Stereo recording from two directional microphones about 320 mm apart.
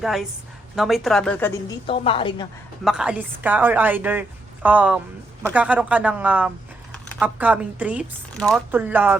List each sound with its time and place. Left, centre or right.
0.0 s a woman's voice: centre
2.8 s speech: centre
6.9 s a sound: centre
7.3 s speech: centre